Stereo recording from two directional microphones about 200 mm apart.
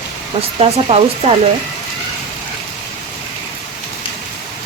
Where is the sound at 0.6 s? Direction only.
30° right (ahead or behind).